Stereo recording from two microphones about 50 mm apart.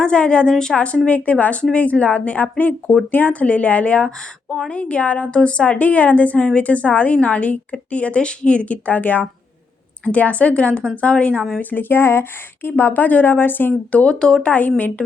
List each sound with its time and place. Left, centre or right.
0.0 s a woman's voice: centre
11.7 s speech: left
13.9 s speech: left
14.4 s speech: left